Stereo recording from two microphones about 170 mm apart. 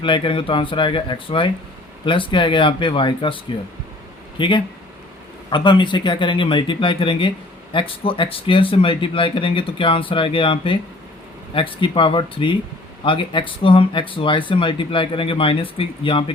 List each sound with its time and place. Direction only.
0.0 s speech: 30° left (ahead or behind)